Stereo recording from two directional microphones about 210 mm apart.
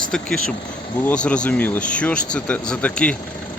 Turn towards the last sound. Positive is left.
turn(degrees=5)  # may be behind; listen again after turning